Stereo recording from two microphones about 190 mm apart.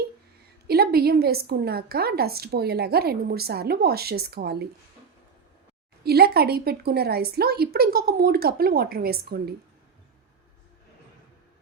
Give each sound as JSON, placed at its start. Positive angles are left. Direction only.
{"t": 0.7, "sound": "a woman's voice", "side_deg": -55}
{"t": 6.0, "sound": "a woman's voice", "side_deg": -55}